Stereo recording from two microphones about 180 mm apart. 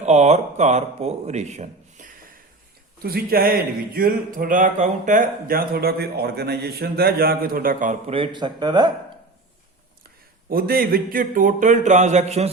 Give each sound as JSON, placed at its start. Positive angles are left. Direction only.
{"t": 0.0, "sound": "a man's voice", "side_deg": -40}
{"t": 3.0, "sound": "speech", "side_deg": -55}
{"t": 8.1, "sound": "speech", "side_deg": -25}
{"t": 10.5, "sound": "speech", "side_deg": -55}